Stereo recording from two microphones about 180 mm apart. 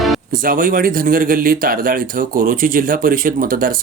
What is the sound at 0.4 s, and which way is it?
Speech, 50° right (ahead or behind).